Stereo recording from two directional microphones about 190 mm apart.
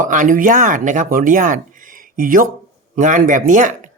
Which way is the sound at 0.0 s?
45° right (ahead or behind).